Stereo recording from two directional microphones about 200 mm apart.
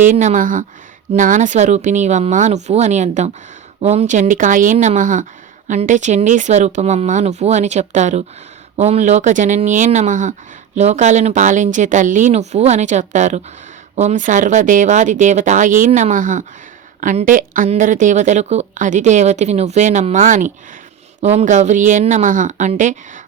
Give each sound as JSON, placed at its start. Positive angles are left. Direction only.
{"t": 0.1, "sound": "a woman's voice", "side_deg": -40}